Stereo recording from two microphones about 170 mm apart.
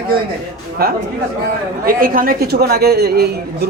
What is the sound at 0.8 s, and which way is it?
A man's voice, 65° right (ahead or behind).